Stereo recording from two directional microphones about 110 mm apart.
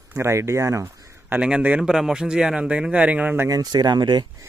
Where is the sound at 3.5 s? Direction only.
35° right (ahead or behind).